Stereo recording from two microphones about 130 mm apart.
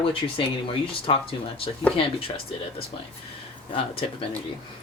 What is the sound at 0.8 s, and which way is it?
Speech, 45° left (ahead or behind).